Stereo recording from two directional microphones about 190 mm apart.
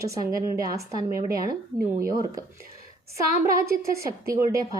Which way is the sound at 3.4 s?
15° right (ahead or behind).